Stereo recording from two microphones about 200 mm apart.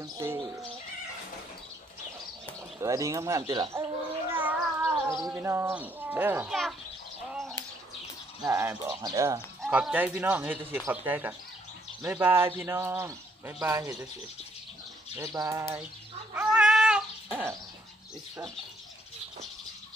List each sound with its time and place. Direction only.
0.0 s bird: 15° right (ahead or behind)
2.8 s speech: 15° right (ahead or behind)
4.3 s cat: 10° right (ahead or behind)
5.3 s speech: 15° right (ahead or behind)
7.2 s a sound: centre (ahead or behind)
8.5 s speech: 15° right (ahead or behind)
9.6 s speech: 5° right (ahead or behind)
15.1 s speech: 15° right (ahead or behind)
16.3 s cat: 5° right (ahead or behind)